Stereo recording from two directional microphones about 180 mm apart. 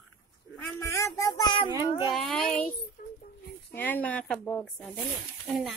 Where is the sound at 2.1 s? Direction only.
Centre (ahead or behind).